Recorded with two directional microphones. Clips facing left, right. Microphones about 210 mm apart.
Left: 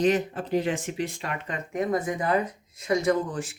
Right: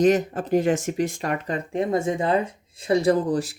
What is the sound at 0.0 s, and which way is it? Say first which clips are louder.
Speech: right 4 dB; 45° right (ahead or behind).